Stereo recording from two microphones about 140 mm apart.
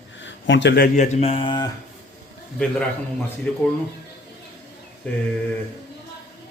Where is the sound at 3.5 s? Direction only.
10° left (ahead or behind).